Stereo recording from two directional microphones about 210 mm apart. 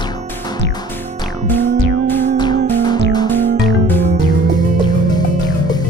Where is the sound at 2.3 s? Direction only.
20° left (ahead or behind).